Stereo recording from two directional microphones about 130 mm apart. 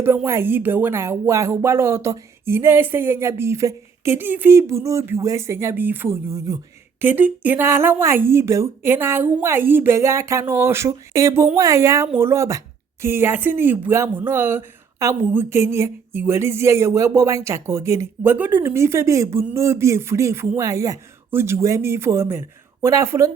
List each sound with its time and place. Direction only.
0.0 s a woman's voice: 15° right (ahead or behind)